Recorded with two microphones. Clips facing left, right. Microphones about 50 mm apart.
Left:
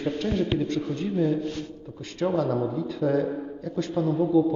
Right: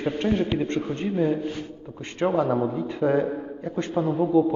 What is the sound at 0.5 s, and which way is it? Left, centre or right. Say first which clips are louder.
Speech: right 1 dB; right.